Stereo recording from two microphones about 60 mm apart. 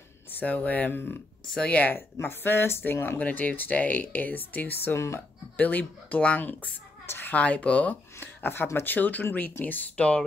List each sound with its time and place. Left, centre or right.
0.4 s speech: left
2.4 s speech: left
3.2 s speech: left
4.9 s speech: left
5.6 s speech: left
7.1 s a sound: left
7.3 s speech: left
8.2 s a sound: left
8.7 s speech: left